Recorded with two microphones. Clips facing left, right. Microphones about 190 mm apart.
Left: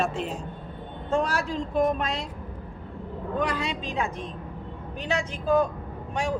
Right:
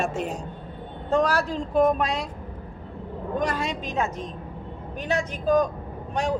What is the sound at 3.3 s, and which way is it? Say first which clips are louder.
Speech: right 1 dB; 45° right (ahead or behind).